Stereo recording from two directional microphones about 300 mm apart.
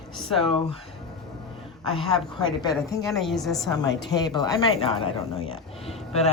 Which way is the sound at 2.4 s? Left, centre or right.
Centre.